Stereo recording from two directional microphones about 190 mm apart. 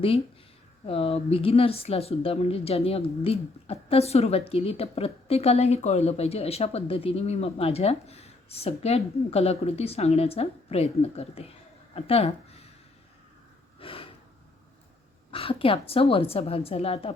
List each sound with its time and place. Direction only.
0.9 s a woman's voice: 30° left (ahead or behind)
13.7 s snort: 30° left (ahead or behind)
15.3 s a woman's voice: 30° left (ahead or behind)